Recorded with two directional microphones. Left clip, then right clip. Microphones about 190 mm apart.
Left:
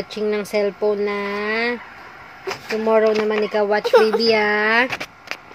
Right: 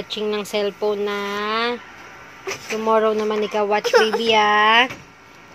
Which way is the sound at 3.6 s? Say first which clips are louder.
Left 1 dB; 25° left (ahead or behind).